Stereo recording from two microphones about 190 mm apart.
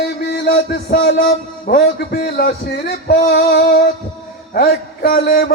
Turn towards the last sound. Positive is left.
turn(degrees=50)  # may be behind; listen again after turning